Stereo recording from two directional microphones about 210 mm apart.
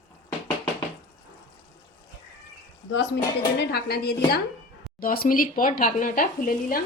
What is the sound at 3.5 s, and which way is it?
A woman's voice, 50° left (ahead or behind).